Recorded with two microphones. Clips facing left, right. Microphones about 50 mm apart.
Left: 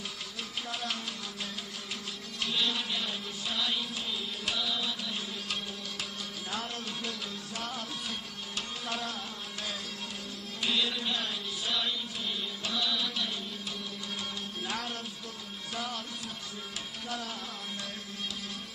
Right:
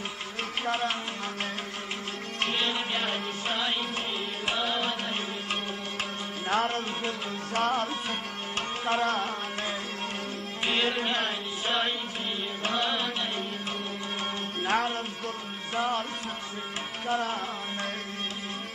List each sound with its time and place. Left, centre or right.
0.7 s music: right
2.4 s music: right
10.6 s music: right
14.6 s music: right
17.1 s music: right